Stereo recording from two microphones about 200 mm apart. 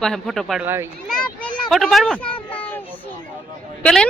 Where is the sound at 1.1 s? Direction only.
Centre (ahead or behind).